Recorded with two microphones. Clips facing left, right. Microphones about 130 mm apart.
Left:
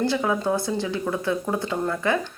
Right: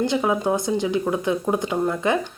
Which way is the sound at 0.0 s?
20° right (ahead or behind).